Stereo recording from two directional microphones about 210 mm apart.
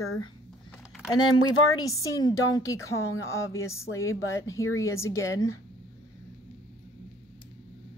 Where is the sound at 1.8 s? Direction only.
15° left (ahead or behind).